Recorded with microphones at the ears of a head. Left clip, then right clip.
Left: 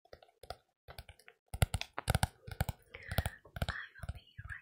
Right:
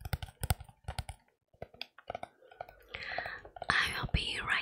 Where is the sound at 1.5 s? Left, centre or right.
Left.